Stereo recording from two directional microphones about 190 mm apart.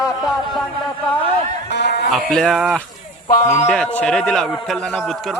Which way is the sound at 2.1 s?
Centre (ahead or behind).